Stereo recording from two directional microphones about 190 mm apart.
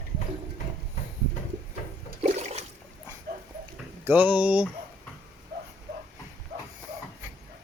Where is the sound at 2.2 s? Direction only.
35° right (ahead or behind).